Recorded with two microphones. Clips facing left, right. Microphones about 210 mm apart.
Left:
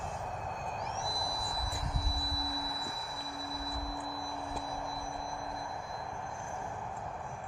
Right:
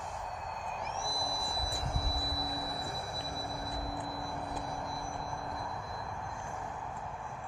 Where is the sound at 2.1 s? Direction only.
20° right (ahead or behind).